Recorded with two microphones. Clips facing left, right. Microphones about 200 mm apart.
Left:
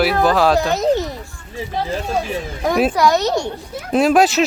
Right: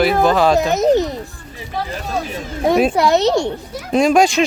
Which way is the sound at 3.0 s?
25° right (ahead or behind).